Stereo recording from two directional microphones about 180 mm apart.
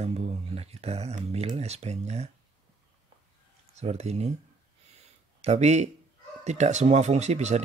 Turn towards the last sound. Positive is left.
turn(degrees=-40)  # may be behind; listen again after turning